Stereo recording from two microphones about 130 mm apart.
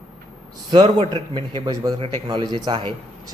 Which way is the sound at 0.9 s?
45° right (ahead or behind).